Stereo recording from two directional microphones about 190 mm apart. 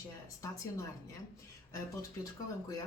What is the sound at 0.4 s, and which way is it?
Speech, 15° left (ahead or behind).